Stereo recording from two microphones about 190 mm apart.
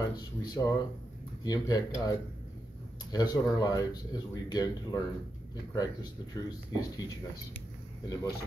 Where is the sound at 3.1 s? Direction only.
20° left (ahead or behind).